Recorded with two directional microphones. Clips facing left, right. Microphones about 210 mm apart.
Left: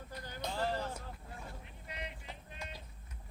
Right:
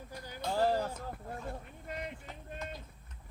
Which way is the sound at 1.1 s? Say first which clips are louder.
Right 8 dB; 55° right (ahead or behind).